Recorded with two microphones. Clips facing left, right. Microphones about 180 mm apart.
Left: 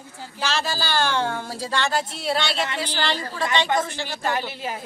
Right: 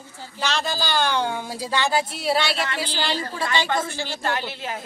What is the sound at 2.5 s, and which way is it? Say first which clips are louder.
Speech: left 1 dB; 20° left (ahead or behind).